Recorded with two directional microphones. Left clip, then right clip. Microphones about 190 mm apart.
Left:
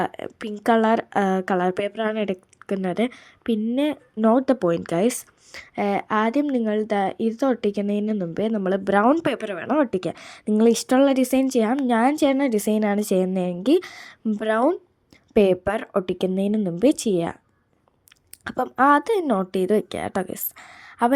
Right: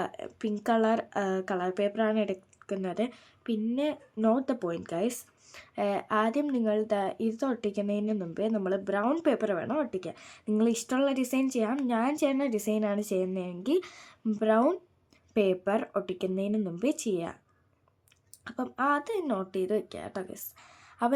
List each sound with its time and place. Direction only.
0.0 s a woman's voice: 30° left (ahead or behind)
18.4 s a woman's voice: 40° left (ahead or behind)